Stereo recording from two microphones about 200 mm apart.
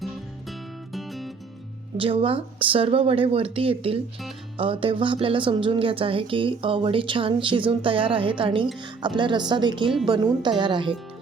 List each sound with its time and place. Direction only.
0.9 s music: centre (ahead or behind)
2.0 s speech: 25° right (ahead or behind)